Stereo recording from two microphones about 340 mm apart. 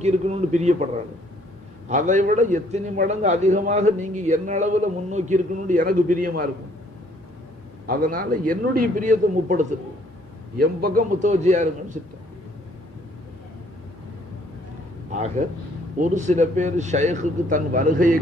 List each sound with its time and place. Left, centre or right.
0.0 s a man's voice: centre
1.9 s a man's voice: right
7.8 s a man's voice: right
15.0 s a man's voice: right